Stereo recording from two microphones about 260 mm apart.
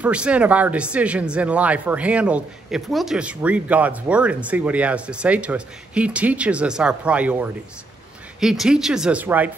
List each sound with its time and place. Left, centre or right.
0.0 s speech: centre